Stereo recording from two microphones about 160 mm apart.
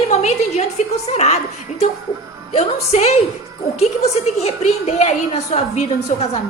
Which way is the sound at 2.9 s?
40° left (ahead or behind).